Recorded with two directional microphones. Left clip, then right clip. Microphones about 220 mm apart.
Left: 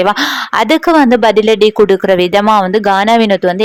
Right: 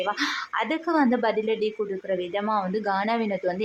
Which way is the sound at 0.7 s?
40° left (ahead or behind).